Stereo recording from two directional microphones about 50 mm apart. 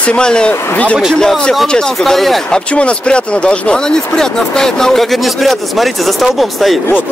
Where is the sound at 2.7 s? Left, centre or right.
Left.